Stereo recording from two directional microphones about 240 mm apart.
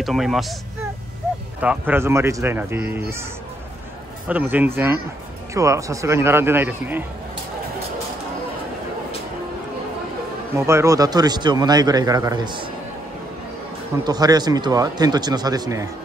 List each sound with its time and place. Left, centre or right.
0.0 s speech: centre
1.6 s speech: centre
4.3 s speech: centre
10.5 s speech: centre
13.9 s speech: centre